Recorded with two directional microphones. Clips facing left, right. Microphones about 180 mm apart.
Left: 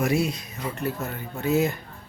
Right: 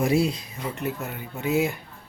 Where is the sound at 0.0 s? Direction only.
30° right (ahead or behind).